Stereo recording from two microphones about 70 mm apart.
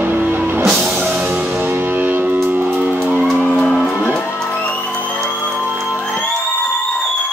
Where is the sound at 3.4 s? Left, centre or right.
Centre.